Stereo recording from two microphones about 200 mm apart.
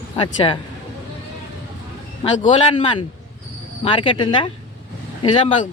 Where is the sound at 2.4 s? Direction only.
30° left (ahead or behind).